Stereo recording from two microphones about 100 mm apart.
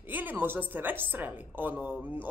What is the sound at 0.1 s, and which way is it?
A woman's voice, 20° right (ahead or behind).